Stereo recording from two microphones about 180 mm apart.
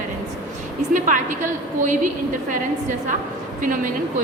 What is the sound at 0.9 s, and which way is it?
A woman's voice, 45° right (ahead or behind).